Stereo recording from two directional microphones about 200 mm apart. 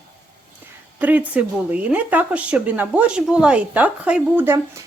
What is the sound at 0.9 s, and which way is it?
Speech, 10° right (ahead or behind).